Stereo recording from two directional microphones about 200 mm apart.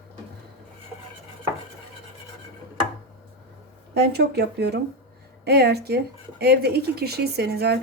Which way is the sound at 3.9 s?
55° right (ahead or behind).